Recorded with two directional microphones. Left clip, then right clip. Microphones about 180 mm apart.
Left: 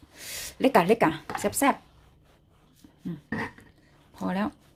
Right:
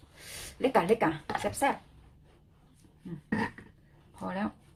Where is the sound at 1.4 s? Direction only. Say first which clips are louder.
Left 5 dB; 65° left (ahead or behind).